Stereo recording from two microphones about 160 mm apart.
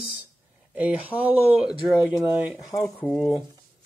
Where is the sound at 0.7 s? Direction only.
10° right (ahead or behind).